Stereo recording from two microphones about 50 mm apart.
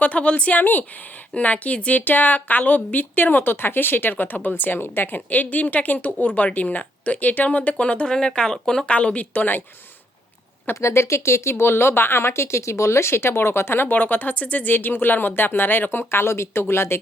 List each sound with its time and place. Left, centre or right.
0.0 s a woman's voice: left; by 8.9 s centre
8.9 s a woman's voice: left
10.8 s speech: left